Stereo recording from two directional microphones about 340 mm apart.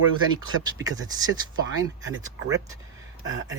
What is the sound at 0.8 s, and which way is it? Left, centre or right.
Speech, centre.